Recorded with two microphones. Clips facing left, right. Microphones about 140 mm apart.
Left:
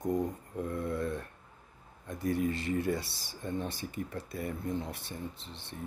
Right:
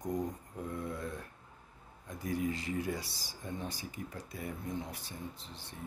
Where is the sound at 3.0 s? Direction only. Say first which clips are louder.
Left 4 dB; 65° left (ahead or behind).